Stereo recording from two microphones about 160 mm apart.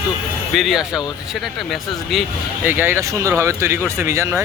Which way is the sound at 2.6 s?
15° right (ahead or behind).